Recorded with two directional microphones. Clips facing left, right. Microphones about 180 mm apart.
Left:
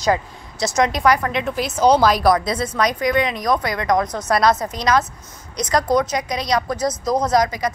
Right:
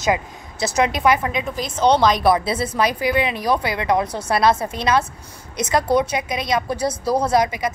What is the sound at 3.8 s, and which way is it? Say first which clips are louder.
Speech: left 2 dB; 10° right (ahead or behind).